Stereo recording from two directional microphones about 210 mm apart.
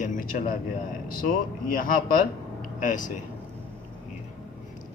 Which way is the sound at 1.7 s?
40° left (ahead or behind).